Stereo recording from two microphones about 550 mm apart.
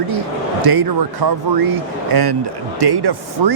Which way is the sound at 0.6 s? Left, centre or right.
Right.